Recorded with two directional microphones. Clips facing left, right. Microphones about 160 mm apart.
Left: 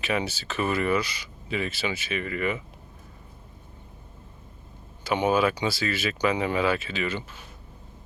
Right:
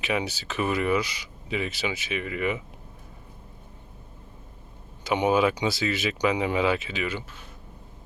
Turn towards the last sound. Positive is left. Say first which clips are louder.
# even
turn(degrees=-10)  # may be behind; listen again after turning